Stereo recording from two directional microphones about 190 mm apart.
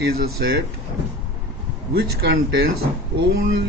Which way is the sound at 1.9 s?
55° right (ahead or behind).